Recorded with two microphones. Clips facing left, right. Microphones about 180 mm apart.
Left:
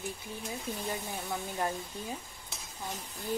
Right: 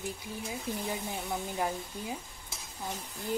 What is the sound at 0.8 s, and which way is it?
Speech, 10° right (ahead or behind).